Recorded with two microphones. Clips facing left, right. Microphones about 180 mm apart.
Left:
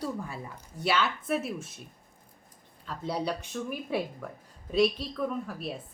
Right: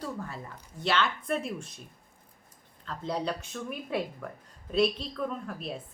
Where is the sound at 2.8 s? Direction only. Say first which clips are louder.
Even; 10° left (ahead or behind).